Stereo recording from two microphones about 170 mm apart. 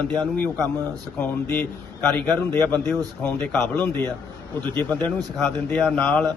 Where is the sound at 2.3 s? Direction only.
20° right (ahead or behind).